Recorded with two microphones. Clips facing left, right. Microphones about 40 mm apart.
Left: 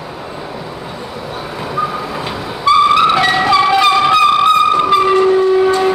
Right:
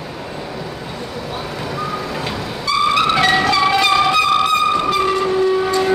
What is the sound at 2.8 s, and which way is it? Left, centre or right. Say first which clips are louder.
Train: even; centre.